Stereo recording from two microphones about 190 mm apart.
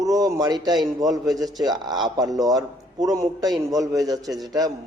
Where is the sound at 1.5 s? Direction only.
20° right (ahead or behind).